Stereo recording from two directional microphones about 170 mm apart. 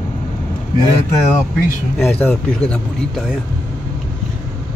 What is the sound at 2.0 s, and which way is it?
Speech, 10° left (ahead or behind).